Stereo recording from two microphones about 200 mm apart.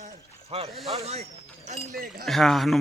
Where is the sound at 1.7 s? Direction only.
35° right (ahead or behind).